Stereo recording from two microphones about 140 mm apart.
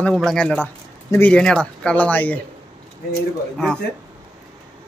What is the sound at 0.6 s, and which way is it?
A man's voice, 15° left (ahead or behind).